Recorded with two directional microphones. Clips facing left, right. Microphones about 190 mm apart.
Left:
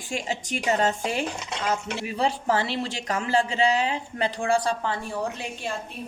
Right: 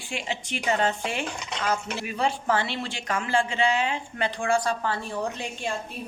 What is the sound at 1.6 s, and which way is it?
Speech, 25° left (ahead or behind).